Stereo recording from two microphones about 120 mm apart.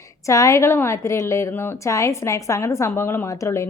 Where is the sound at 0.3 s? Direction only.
25° left (ahead or behind).